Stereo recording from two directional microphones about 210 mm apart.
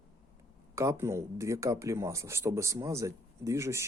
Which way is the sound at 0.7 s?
15° right (ahead or behind).